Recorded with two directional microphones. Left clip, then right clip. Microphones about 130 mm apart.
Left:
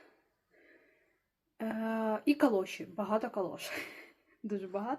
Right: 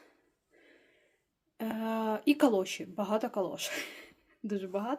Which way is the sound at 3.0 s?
35° right (ahead or behind).